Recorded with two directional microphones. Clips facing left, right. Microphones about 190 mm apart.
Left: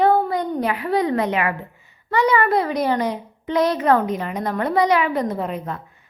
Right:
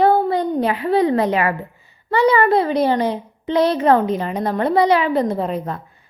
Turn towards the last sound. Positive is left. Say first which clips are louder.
# right 3 dB
turn(degrees=-35)  # may be behind; listen again after turning